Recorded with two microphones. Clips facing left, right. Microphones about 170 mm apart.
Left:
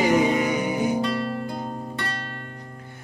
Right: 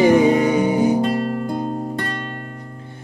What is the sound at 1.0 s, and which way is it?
Music, 45° right (ahead or behind).